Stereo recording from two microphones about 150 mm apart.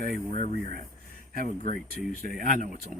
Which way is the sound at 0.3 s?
55° right (ahead or behind).